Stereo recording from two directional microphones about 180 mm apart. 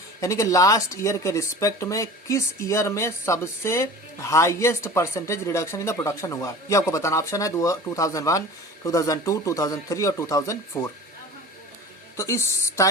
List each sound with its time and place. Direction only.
0.2 s speech: 15° left (ahead or behind)
12.1 s speech: 15° left (ahead or behind)